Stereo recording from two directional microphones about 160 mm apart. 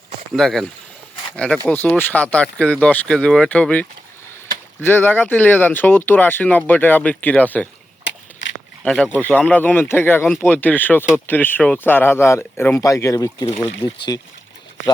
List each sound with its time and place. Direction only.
0.3 s speech: centre (ahead or behind)
8.8 s speech: 5° left (ahead or behind)